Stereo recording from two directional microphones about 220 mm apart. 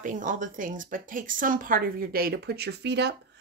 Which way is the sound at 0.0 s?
35° right (ahead or behind).